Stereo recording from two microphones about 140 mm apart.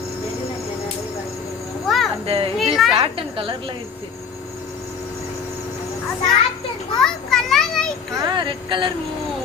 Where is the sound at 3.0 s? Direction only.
40° right (ahead or behind).